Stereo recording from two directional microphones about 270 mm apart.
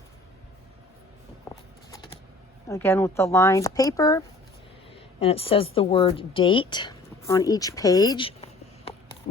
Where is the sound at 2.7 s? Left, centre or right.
Centre.